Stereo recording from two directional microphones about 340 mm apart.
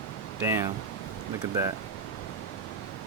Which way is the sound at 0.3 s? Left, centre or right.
Centre.